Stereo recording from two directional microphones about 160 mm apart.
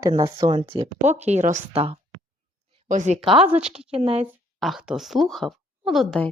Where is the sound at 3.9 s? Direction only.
40° right (ahead or behind).